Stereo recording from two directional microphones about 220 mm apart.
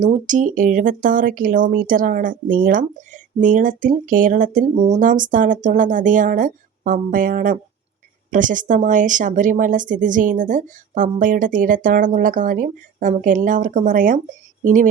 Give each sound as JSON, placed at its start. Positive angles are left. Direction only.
{"t": 0.0, "sound": "speech", "side_deg": -35}